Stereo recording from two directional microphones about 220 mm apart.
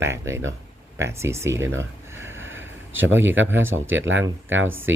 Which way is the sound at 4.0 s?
55° right (ahead or behind).